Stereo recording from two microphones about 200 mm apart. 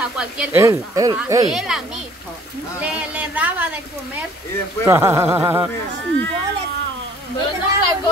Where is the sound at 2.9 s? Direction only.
5° right (ahead or behind).